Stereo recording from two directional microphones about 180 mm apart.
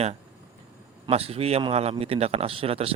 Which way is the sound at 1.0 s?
35° right (ahead or behind).